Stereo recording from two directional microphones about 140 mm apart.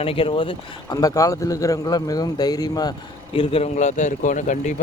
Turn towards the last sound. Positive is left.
turn(degrees=65)  # may be behind; listen again after turning